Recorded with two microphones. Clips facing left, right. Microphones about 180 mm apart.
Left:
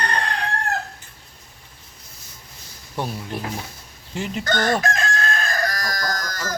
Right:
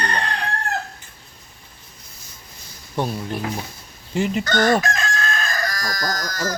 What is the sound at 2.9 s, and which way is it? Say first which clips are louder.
Speech: right 3 dB; centre (ahead or behind).